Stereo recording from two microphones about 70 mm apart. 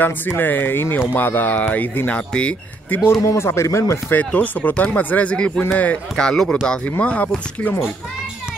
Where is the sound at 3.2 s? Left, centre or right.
Left.